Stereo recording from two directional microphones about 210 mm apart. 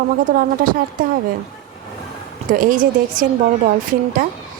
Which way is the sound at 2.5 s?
40° right (ahead or behind).